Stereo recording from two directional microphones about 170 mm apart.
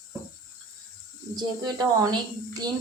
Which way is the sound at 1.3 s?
25° right (ahead or behind).